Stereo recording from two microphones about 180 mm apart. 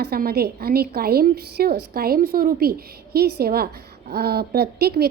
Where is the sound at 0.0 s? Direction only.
60° right (ahead or behind).